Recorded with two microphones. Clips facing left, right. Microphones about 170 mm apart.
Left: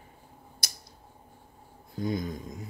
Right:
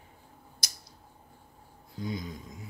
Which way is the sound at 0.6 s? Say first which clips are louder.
Left 4 dB; 55° left (ahead or behind).